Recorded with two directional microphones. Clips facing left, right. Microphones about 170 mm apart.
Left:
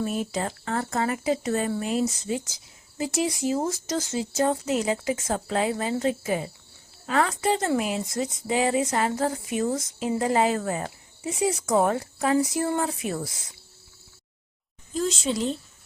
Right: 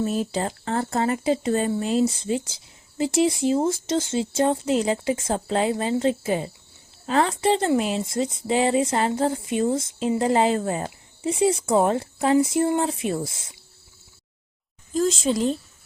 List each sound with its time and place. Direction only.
0.0 s speech: 30° right (ahead or behind)
14.9 s a woman's voice: 45° right (ahead or behind)